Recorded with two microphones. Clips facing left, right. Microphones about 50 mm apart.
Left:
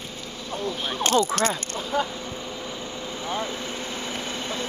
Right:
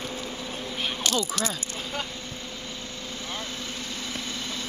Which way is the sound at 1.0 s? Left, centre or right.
Left.